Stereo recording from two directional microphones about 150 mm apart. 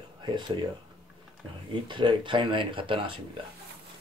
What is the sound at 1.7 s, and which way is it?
Speech, 30° right (ahead or behind).